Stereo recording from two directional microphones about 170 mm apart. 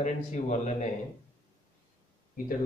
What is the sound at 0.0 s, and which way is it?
Speech, 45° left (ahead or behind).